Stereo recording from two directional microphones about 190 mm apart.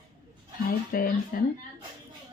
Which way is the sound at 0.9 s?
50° left (ahead or behind).